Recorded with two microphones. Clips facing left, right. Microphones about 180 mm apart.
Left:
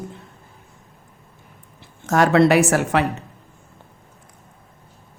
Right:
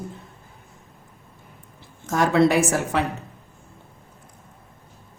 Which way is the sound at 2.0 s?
70° left (ahead or behind).